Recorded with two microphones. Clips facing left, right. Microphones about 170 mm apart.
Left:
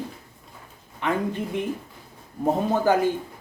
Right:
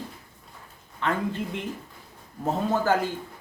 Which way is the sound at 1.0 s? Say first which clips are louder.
Left 2 dB; 15° left (ahead or behind).